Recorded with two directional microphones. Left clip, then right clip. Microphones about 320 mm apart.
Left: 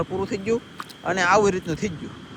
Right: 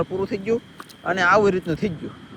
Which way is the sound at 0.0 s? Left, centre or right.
Centre.